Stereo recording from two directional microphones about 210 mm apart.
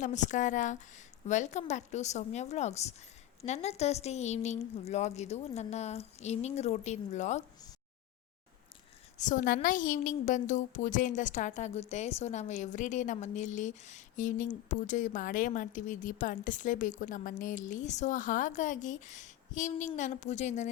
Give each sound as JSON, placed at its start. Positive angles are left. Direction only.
{"t": 0.0, "sound": "a woman's voice", "side_deg": 35}
{"t": 9.1, "sound": "a woman's voice", "side_deg": 35}